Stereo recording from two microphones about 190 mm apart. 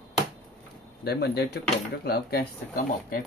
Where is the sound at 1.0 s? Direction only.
55° left (ahead or behind).